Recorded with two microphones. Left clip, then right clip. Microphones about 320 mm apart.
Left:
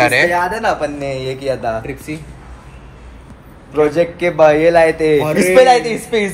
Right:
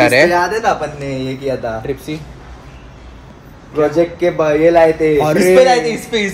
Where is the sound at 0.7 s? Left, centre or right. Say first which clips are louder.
Right 1 dB; left.